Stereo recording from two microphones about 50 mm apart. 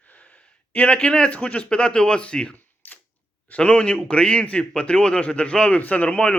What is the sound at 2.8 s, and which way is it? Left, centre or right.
Camera, left.